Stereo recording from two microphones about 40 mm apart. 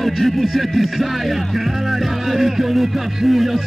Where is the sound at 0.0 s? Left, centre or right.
Centre.